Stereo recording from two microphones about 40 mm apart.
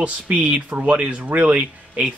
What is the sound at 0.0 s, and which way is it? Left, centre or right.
Speech, right.